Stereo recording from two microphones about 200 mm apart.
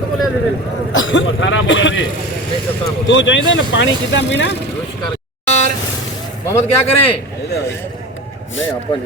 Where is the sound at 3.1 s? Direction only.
70° left (ahead or behind).